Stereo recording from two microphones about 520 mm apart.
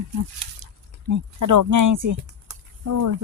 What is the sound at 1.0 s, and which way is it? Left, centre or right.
Speech, right.